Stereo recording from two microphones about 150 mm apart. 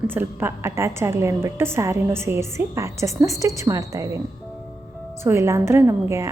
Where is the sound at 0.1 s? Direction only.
15° right (ahead or behind).